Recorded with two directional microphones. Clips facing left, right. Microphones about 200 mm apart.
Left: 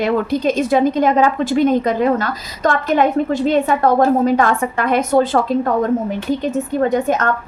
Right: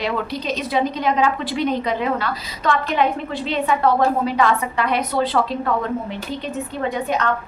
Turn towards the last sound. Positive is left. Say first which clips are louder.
# left 6 dB
turn(degrees=45)  # may be behind; listen again after turning